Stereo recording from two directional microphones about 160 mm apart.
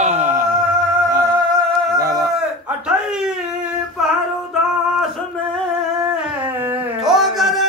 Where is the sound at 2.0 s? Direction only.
70° right (ahead or behind).